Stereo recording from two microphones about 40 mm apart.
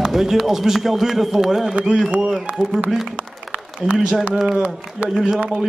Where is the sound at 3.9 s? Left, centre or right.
Centre.